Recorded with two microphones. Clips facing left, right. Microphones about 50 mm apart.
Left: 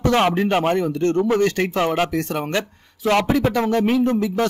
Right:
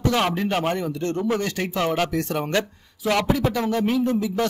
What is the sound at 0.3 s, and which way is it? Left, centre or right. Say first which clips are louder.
Speech: left 5 dB; left.